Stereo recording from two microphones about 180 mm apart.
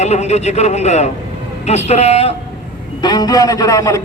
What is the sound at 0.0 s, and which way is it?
Speech, 40° left (ahead or behind).